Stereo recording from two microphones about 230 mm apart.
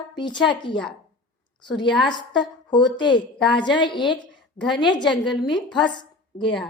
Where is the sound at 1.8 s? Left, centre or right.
Centre.